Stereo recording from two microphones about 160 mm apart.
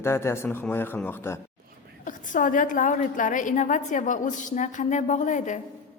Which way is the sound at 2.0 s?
55° left (ahead or behind).